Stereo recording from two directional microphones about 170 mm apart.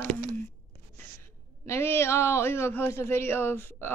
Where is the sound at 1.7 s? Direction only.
15° left (ahead or behind).